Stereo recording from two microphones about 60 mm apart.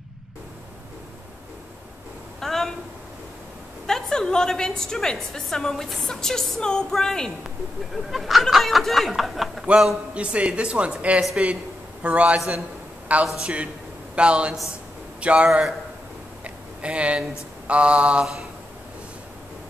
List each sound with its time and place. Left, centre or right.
2.4 s a sound: centre
3.8 s a woman's voice: centre
10.1 s speech: centre
12.4 s a man's voice: centre
16.4 s a sound: right
17.6 s speech: centre